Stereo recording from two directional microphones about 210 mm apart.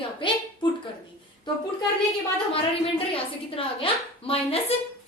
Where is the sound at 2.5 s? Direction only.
25° left (ahead or behind).